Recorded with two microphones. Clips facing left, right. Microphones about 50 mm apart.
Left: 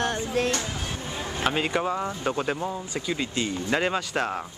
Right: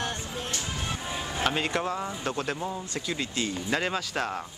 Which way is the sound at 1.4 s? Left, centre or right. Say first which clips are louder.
Left 3 dB; centre.